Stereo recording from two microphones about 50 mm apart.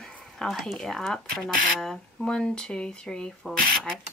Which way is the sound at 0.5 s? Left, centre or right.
Centre.